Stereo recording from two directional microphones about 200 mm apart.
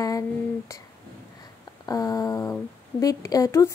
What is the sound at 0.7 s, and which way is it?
Speech, 15° left (ahead or behind).